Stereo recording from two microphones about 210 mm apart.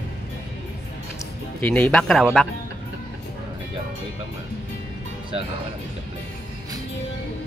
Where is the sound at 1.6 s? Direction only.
5° left (ahead or behind).